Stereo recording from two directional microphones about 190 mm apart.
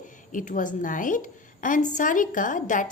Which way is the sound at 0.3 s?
45° left (ahead or behind).